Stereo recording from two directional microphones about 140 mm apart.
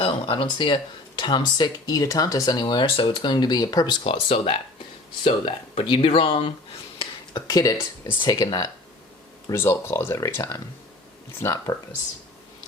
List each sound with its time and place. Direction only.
0.0 s speech: 40° left (ahead or behind)
7.0 s a sound: 30° left (ahead or behind)
8.2 s speech: 30° left (ahead or behind)